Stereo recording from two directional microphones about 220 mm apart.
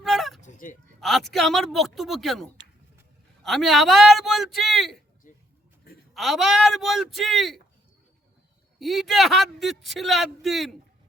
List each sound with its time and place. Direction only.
0.0 s a sound: centre (ahead or behind)
0.4 s honk: 35° left (ahead or behind)
0.9 s speech: centre (ahead or behind)
6.1 s speech: centre (ahead or behind)
8.8 s speech: centre (ahead or behind)